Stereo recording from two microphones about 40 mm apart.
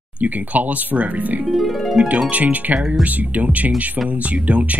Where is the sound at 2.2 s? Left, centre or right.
Right.